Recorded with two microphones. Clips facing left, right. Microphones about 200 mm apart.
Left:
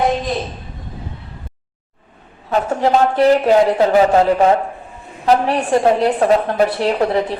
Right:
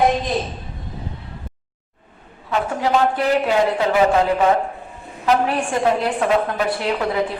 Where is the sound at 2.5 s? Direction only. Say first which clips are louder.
Left 4 dB; 40° left (ahead or behind).